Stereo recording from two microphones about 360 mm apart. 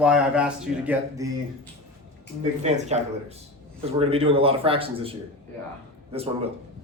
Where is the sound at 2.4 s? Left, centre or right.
Centre.